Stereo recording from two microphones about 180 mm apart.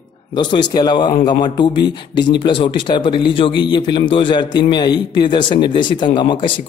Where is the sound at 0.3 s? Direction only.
25° left (ahead or behind).